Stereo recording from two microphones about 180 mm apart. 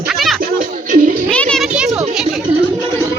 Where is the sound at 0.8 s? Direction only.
45° right (ahead or behind).